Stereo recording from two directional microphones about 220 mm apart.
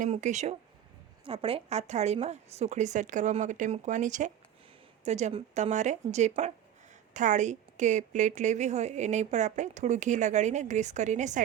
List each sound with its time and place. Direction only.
0.0 s a woman's voice: 35° right (ahead or behind)